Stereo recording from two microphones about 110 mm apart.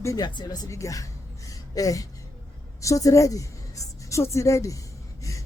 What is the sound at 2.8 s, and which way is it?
A woman's voice, 30° left (ahead or behind).